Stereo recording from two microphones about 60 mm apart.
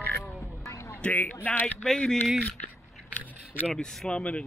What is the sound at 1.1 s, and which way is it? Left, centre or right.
Speech, left.